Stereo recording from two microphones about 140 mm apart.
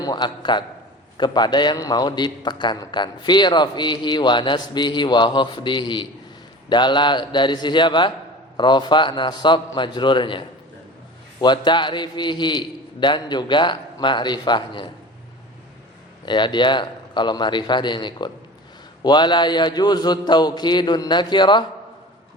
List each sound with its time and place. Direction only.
0.0 s a man's voice: 30° left (ahead or behind)
16.2 s a man's voice: 35° left (ahead or behind)